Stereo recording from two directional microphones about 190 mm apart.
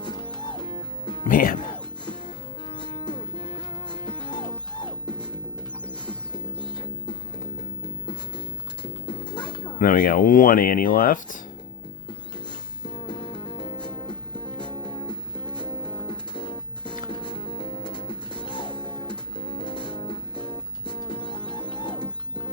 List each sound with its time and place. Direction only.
0.0 s music: 25° left (ahead or behind)
1.2 s speech: 45° left (ahead or behind)
2.7 s music: 25° left (ahead or behind)
8.8 s pigeon: 25° left (ahead or behind)
9.7 s speech: 45° left (ahead or behind)
13.1 s music: 25° left (ahead or behind)